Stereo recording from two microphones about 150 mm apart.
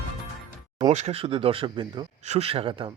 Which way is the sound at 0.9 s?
45° right (ahead or behind).